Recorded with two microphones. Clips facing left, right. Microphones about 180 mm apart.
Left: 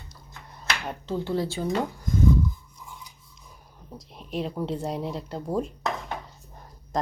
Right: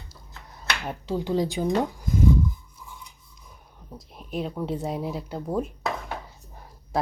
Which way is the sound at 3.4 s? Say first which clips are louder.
Even; centre (ahead or behind).